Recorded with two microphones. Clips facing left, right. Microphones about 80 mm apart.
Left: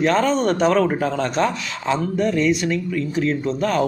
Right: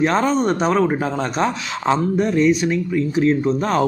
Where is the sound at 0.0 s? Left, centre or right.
Centre.